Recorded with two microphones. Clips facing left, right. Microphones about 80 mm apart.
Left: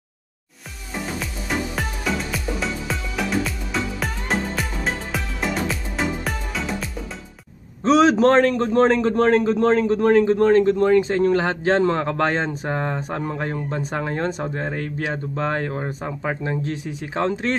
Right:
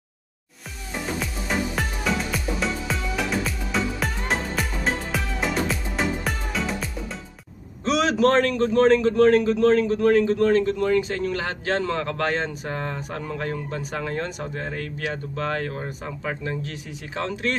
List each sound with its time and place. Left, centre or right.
1.2 s music: centre
7.8 s a man's voice: left